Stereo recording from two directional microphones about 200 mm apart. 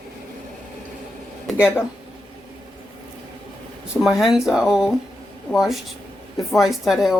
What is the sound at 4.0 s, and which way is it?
Speech, centre (ahead or behind).